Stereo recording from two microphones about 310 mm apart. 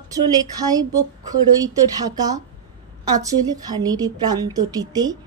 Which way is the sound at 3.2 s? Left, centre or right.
Centre.